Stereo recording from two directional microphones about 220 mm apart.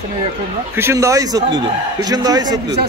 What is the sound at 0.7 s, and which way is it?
A man's voice, 10° right (ahead or behind).